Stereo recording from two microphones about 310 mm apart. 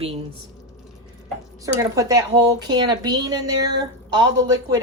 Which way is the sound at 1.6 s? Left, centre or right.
Centre.